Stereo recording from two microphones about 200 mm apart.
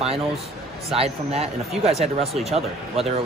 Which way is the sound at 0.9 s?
30° right (ahead or behind).